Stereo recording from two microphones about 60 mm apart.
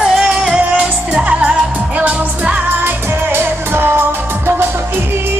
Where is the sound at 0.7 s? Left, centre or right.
Centre.